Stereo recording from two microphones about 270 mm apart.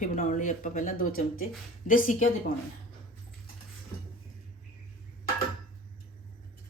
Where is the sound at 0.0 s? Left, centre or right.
Left.